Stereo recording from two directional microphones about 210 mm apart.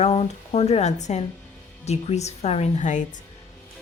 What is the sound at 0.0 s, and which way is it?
Speech, 30° left (ahead or behind).